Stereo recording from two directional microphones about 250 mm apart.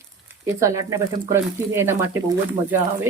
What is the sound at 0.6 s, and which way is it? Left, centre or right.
Speech, centre.